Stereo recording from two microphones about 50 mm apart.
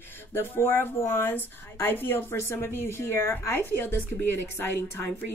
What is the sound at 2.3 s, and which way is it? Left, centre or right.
Speech, left.